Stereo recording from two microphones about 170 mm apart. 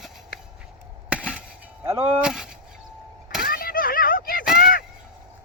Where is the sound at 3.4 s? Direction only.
60° left (ahead or behind).